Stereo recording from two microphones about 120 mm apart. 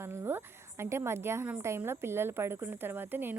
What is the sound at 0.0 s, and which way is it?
A woman's voice, 20° right (ahead or behind).